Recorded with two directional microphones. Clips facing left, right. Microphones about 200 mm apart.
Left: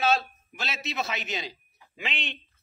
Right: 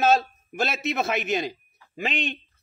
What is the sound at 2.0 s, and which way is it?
Speech, 40° right (ahead or behind).